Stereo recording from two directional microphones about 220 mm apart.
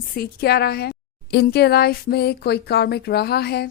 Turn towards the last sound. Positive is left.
turn(degrees=45)  # may be behind; listen again after turning